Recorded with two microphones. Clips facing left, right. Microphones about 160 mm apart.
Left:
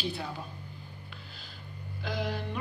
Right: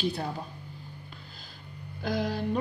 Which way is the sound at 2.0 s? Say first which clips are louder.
Right 5 dB; 40° right (ahead or behind).